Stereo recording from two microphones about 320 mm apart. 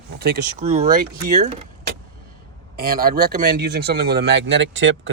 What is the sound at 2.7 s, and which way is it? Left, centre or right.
Speech, right.